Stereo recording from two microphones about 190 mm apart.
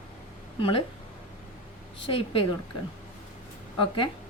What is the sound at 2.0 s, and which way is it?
Speech, 30° left (ahead or behind).